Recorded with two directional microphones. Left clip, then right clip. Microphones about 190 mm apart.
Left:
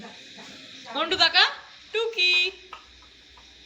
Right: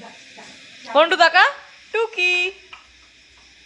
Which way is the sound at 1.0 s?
25° right (ahead or behind).